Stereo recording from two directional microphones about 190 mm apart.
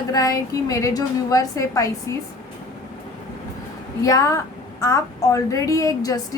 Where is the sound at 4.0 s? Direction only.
20° left (ahead or behind).